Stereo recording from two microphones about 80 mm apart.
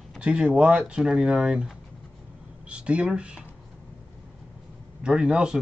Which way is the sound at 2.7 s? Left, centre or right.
Centre.